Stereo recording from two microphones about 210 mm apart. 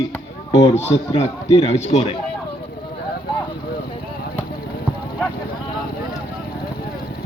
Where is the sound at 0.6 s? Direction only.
30° left (ahead or behind).